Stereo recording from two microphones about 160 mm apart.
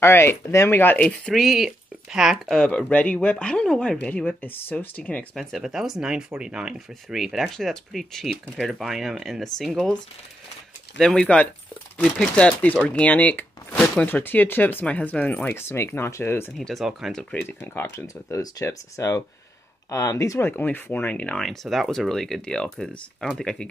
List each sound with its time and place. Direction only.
0.0 s speech: 15° left (ahead or behind)
11.0 s speech: 5° left (ahead or behind)
16.5 s speech: centre (ahead or behind)